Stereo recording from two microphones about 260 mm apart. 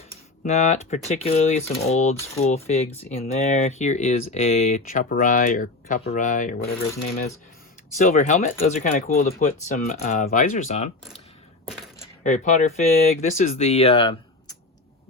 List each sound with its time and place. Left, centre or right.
0.4 s speech: left
7.9 s speech: left
12.2 s speech: left